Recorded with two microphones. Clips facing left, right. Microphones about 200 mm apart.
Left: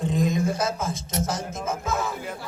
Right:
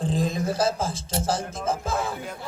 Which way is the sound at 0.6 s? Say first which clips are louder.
Right 2 dB; 30° right (ahead or behind).